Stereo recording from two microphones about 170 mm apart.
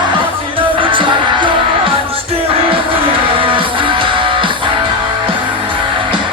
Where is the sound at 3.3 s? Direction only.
30° right (ahead or behind).